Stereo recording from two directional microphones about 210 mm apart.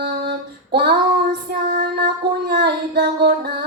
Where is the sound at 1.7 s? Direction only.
45° right (ahead or behind).